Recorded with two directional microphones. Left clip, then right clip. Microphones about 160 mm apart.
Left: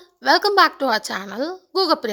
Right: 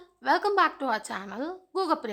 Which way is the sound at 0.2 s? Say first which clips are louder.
Left 8 dB; 30° left (ahead or behind).